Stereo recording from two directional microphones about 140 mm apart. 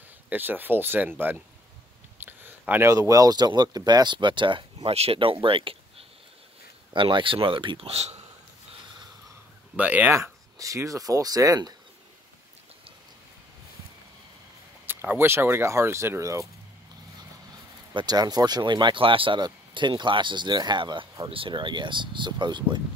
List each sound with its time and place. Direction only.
0.3 s speech: 15° right (ahead or behind); by 8.3 s 45° right (ahead or behind)
9.8 s speech: 10° right (ahead or behind)
10.1 s speech: 20° right (ahead or behind)
14.9 s speech: 15° right (ahead or behind)
17.9 s speech: 30° right (ahead or behind)